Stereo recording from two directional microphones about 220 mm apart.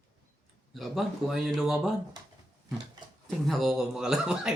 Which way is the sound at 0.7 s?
Centre (ahead or behind).